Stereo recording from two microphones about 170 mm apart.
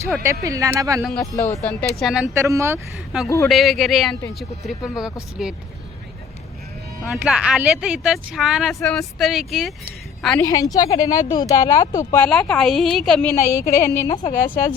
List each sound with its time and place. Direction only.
0.4 s speech: 20° right (ahead or behind)
1.4 s a woman's voice: 15° left (ahead or behind)
2.0 s speech: centre (ahead or behind)
2.3 s speech: 15° right (ahead or behind)
3.2 s a woman's voice: 20° left (ahead or behind)
3.5 s speech: centre (ahead or behind)
7.0 s speech: 5° right (ahead or behind)
10.4 s speech: 20° left (ahead or behind)
12.2 s speech: 5° left (ahead or behind)
13.3 s a woman's voice: 15° left (ahead or behind)